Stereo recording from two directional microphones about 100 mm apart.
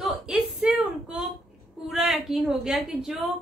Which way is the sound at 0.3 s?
10° right (ahead or behind).